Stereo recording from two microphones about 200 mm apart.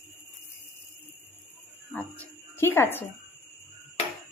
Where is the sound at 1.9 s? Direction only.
10° left (ahead or behind).